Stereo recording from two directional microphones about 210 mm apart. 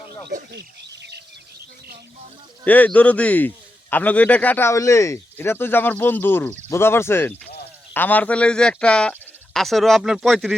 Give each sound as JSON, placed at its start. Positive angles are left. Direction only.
{"t": 0.3, "sound": "speech", "side_deg": -50}
{"t": 2.6, "sound": "speech", "side_deg": 5}